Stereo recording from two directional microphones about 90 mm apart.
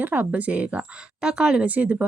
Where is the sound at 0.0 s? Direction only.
20° right (ahead or behind).